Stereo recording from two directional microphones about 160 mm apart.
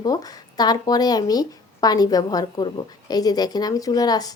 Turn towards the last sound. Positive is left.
turn(degrees=25)  # may be behind; listen again after turning